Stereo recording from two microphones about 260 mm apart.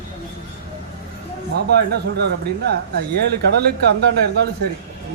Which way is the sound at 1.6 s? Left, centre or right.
Right.